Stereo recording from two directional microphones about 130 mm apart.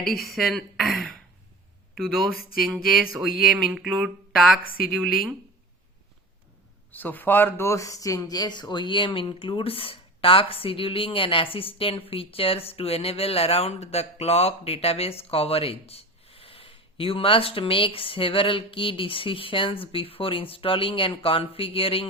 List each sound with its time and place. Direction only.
0.0 s speech: centre (ahead or behind)
2.6 s speech: centre (ahead or behind)
6.9 s speech: 15° left (ahead or behind); by 22.0 s 45° left (ahead or behind)